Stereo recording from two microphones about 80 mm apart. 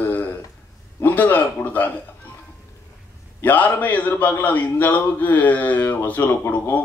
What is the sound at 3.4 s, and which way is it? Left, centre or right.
A man's voice, left.